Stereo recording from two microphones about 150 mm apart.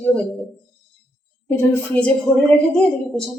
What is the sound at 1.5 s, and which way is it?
Speech, 15° left (ahead or behind).